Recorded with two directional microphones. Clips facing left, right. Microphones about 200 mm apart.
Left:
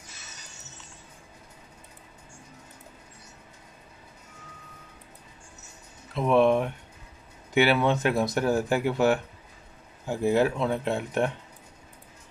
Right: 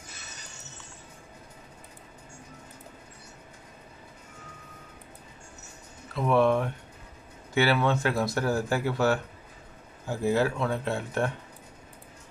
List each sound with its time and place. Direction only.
6.1 s speech: 20° left (ahead or behind)